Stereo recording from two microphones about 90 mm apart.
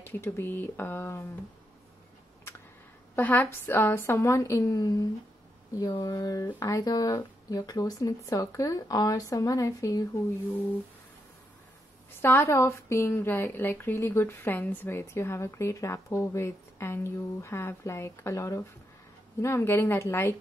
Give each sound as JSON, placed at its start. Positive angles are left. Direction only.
{"t": 0.0, "sound": "speech", "side_deg": 25}
{"t": 3.2, "sound": "speech", "side_deg": 20}
{"t": 5.8, "sound": "speech", "side_deg": 55}
{"t": 12.2, "sound": "speech", "side_deg": 30}